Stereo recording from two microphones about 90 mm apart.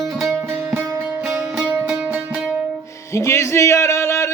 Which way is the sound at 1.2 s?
5° right (ahead or behind).